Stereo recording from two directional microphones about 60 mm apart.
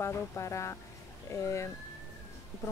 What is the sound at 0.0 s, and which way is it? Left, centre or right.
A woman's voice, left.